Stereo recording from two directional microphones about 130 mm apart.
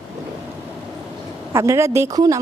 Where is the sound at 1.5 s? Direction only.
20° right (ahead or behind).